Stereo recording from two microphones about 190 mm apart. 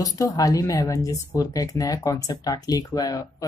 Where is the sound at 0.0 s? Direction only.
20° left (ahead or behind).